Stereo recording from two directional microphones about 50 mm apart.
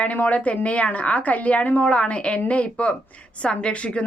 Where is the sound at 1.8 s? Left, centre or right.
Left.